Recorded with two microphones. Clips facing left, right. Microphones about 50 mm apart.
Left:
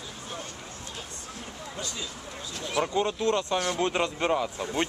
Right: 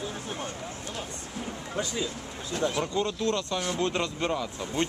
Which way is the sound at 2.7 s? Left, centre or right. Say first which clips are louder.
Left 2 dB; centre.